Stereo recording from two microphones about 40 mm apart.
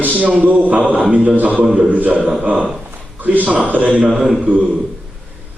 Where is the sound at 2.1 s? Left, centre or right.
Right.